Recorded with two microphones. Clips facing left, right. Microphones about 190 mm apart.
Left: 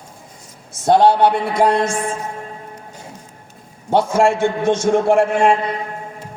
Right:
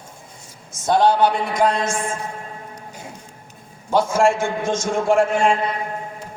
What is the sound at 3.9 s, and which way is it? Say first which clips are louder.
A man's voice: left 2 dB; 65° left (ahead or behind).